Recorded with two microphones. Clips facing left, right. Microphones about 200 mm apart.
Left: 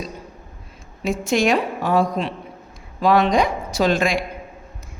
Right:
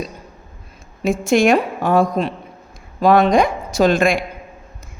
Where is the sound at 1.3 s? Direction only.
50° right (ahead or behind).